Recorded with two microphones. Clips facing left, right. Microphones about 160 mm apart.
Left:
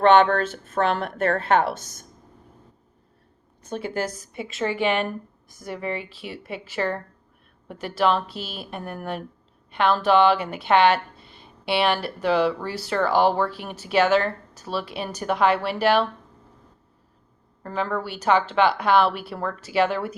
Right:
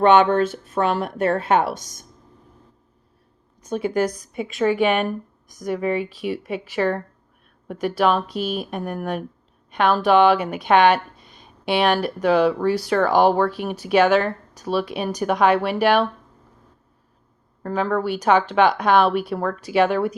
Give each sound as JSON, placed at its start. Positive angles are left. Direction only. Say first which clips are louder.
{"t": 0.0, "sound": "speech", "louder": "right 2 dB", "side_deg": -15}
{"t": 3.6, "sound": "a sound", "louder": "right 5 dB", "side_deg": -10}
{"t": 4.4, "sound": "speech", "louder": "right 6 dB", "side_deg": -15}
{"t": 17.7, "sound": "speech", "louder": "right 5 dB", "side_deg": -10}